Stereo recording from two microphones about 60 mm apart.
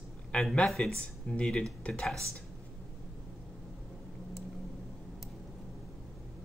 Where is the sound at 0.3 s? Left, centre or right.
Centre.